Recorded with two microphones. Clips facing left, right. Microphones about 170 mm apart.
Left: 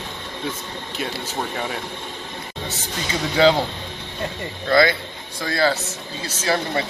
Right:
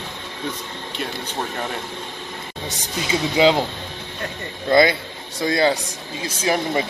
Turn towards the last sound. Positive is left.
turn(degrees=-15)  # may be behind; listen again after turning